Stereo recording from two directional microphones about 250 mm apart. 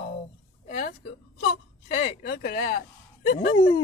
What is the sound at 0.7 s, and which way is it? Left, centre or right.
Speech, left.